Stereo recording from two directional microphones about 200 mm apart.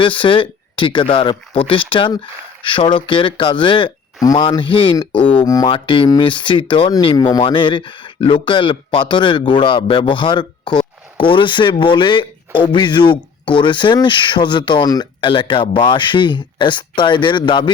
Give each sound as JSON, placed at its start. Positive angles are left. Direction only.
{"t": 0.0, "sound": "speech", "side_deg": 25}